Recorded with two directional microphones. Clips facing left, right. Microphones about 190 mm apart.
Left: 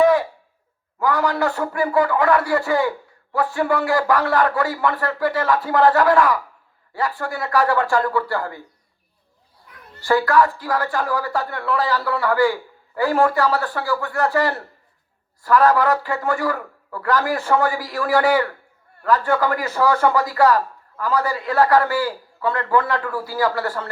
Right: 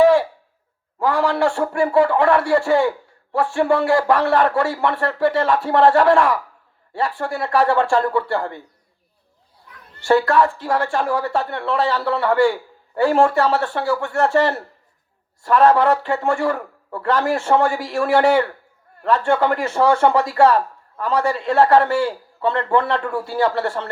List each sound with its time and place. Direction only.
0.0 s cough: 30° right (ahead or behind)
0.9 s a woman's voice: 30° right (ahead or behind)
10.0 s a woman's voice: 25° right (ahead or behind)